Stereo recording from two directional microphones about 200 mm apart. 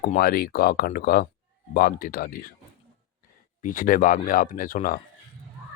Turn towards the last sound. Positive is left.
turn(degrees=45)  # may be behind; listen again after turning